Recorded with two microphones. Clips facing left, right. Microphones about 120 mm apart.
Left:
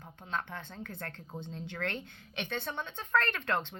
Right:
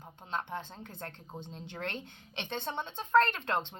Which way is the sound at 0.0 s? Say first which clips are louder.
Even; 20° right (ahead or behind).